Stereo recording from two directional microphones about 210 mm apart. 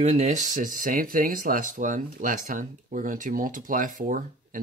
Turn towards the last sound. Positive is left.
turn(degrees=-40)  # may be behind; listen again after turning